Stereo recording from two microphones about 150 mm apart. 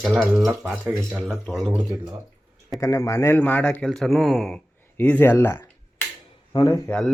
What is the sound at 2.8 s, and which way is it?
Speech, 20° left (ahead or behind).